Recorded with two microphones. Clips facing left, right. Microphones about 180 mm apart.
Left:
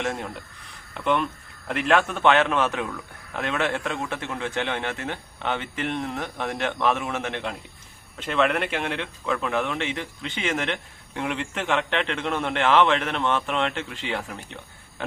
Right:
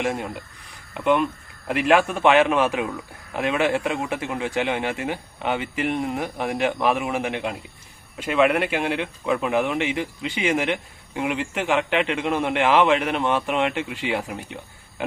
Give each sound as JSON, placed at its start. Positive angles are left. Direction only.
{"t": 0.0, "sound": "speech", "side_deg": -10}